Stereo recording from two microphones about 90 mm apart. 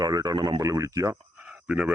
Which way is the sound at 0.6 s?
35° right (ahead or behind).